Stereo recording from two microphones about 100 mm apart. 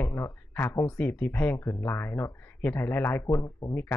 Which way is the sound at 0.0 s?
20° left (ahead or behind).